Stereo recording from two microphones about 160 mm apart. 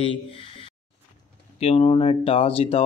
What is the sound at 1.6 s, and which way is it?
Speech, 40° left (ahead or behind).